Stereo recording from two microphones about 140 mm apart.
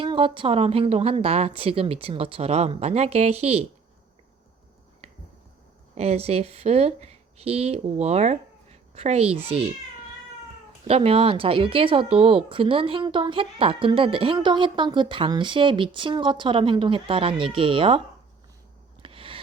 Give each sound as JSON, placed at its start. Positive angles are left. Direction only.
{"t": 0.0, "sound": "a woman's voice", "side_deg": -40}
{"t": 5.9, "sound": "speech", "side_deg": -50}
{"t": 10.8, "sound": "a woman's voice", "side_deg": -45}
{"t": 19.0, "sound": "a sound", "side_deg": -40}